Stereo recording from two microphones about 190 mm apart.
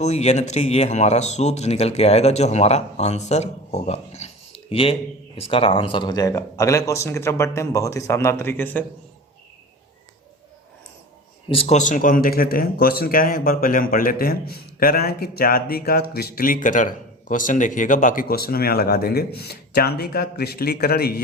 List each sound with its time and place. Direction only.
0.0 s speech: 35° left (ahead or behind); by 8.8 s 10° left (ahead or behind)
11.4 s speech: 30° left (ahead or behind); by 21.2 s 55° left (ahead or behind)